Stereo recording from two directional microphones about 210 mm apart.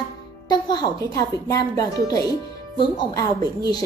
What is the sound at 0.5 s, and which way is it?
Speech, 20° left (ahead or behind).